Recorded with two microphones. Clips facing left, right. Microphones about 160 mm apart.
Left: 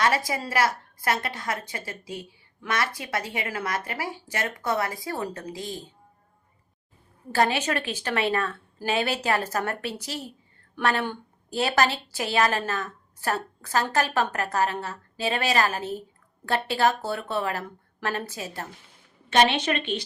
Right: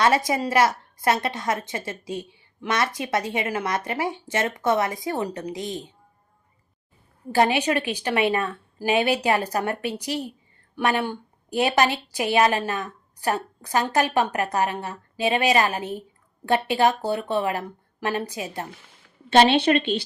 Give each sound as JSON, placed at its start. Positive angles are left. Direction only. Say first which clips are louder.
{"t": 0.3, "sound": "a woman's voice", "louder": "right 5 dB", "side_deg": -25}
{"t": 7.3, "sound": "a woman's voice", "louder": "right 4 dB", "side_deg": -15}
{"t": 19.3, "sound": "a woman's voice", "louder": "right 5 dB", "side_deg": -30}